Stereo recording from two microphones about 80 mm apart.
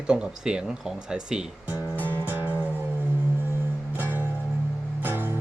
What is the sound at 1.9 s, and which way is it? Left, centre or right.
Music, left.